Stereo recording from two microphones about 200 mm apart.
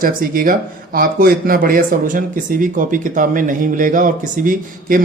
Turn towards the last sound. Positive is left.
turn(degrees=-40)  # may be behind; listen again after turning